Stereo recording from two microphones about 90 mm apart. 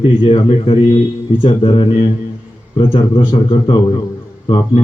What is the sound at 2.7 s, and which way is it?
Speech, 75° left (ahead or behind).